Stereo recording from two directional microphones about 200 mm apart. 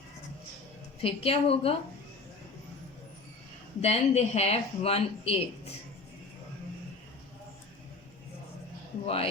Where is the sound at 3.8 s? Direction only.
30° left (ahead or behind).